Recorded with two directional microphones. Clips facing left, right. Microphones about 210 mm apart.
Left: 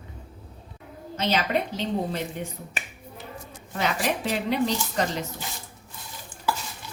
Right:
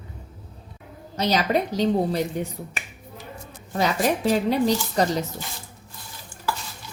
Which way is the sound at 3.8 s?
40° right (ahead or behind).